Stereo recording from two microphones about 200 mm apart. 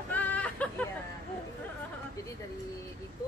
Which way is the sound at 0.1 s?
5° left (ahead or behind).